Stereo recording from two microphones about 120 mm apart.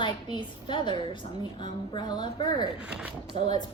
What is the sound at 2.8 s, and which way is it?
Speech, 10° right (ahead or behind).